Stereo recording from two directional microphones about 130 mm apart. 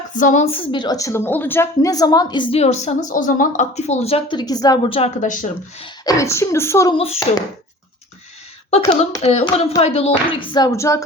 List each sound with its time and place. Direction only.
0.2 s speech: 80° left
0.4 s a woman's voice: 45° left (ahead or behind)
2.6 s speech: 60° left (ahead or behind)
3.1 s speech: 90° left; by 4.4 s 50° left (ahead or behind)
4.4 s a woman's voice: 30° left (ahead or behind)
4.9 s speech: 50° left (ahead or behind)
5.2 s speech: 80° left
6.1 s a woman's voice: 25° left (ahead or behind)
6.9 s speech: 50° left (ahead or behind)
9.0 s speech: 55° left (ahead or behind); by 10.7 s 40° left (ahead or behind)
10.7 s a woman's voice: 25° left (ahead or behind)